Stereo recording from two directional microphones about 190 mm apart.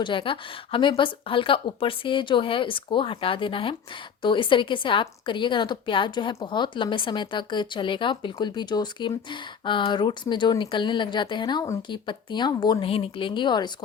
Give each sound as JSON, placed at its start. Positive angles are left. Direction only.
{"t": 0.0, "sound": "a woman's voice", "side_deg": 25}